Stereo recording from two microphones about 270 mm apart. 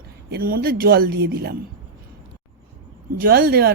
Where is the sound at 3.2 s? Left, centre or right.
Right.